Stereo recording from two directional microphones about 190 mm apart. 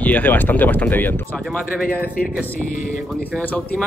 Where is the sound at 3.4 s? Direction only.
5° left (ahead or behind).